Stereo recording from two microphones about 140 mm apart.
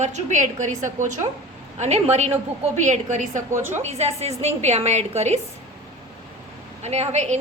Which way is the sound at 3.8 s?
50° right (ahead or behind).